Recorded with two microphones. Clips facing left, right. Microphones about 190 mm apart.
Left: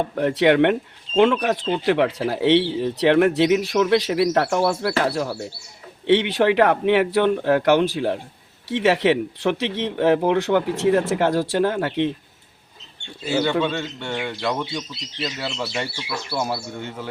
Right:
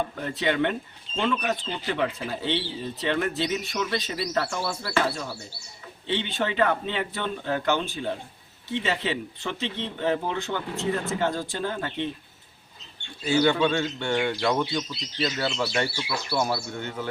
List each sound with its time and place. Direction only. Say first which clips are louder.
0.2 s speech: left 11 dB; 70° left (ahead or behind)
13.2 s a man's voice: left 1 dB; 5° left (ahead or behind)